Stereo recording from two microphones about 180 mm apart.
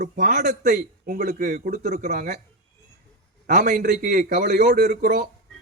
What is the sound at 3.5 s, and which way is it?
Speech, 40° right (ahead or behind).